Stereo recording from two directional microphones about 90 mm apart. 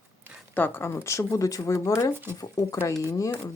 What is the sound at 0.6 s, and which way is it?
Speech, 20° left (ahead or behind).